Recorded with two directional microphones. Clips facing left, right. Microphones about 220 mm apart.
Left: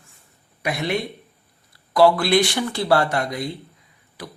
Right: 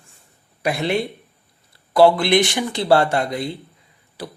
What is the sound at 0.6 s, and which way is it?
A man's voice, 30° right (ahead or behind).